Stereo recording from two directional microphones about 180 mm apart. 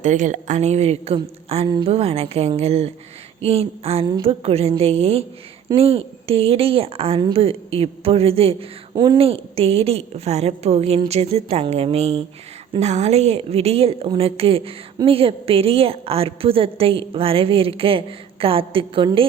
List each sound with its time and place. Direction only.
0.0 s a woman's voice: 45° right (ahead or behind)